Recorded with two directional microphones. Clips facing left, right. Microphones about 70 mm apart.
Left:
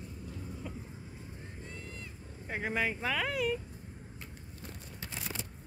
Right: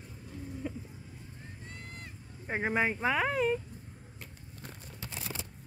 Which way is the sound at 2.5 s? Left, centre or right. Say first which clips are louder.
Right 3 dB; right.